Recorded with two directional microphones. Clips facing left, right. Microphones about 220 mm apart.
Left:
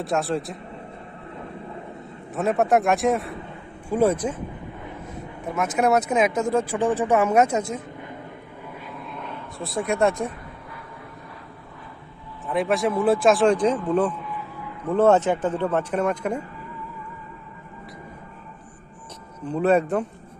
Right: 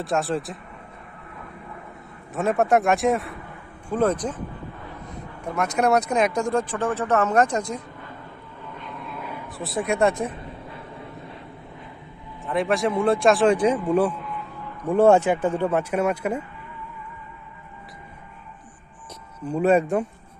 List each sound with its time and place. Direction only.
0.0 s speech: centre (ahead or behind)
2.3 s speech: centre (ahead or behind)
4.9 s vehicle: 20° left (ahead or behind)
5.5 s speech: centre (ahead or behind)
8.6 s vehicle: 10° left (ahead or behind)
12.5 s speech: centre (ahead or behind)
19.5 s speech: 10° right (ahead or behind)